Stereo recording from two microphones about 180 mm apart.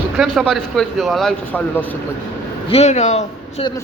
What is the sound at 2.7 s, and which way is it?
Speech, 35° left (ahead or behind).